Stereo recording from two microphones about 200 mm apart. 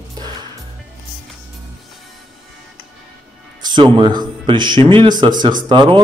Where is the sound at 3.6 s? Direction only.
20° right (ahead or behind).